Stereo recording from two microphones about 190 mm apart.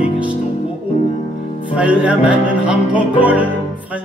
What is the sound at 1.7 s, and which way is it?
Music, 5° right (ahead or behind).